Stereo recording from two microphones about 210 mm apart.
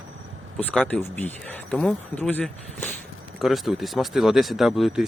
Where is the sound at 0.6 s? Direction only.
5° left (ahead or behind).